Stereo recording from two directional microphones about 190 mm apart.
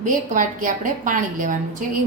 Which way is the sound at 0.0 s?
45° right (ahead or behind).